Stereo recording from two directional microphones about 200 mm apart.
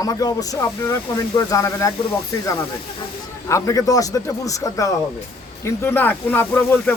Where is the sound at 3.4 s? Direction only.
15° left (ahead or behind).